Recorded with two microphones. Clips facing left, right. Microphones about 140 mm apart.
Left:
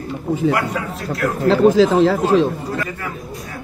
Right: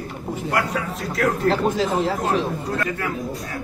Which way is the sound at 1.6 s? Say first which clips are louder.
Left 9 dB; 90° left.